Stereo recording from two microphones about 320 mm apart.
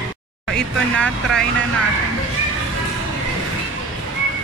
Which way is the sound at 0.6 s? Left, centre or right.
Centre.